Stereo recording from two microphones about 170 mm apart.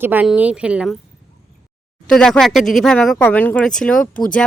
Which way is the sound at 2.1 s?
5° left (ahead or behind).